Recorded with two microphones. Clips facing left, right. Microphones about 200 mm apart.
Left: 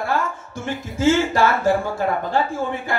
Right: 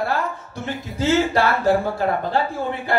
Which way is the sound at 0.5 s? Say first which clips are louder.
Left 1 dB; 50° left (ahead or behind).